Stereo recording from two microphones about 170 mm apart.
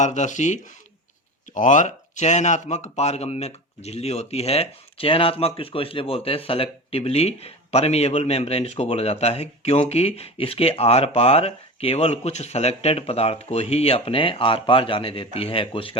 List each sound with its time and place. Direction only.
0.0 s speech: 45° left (ahead or behind)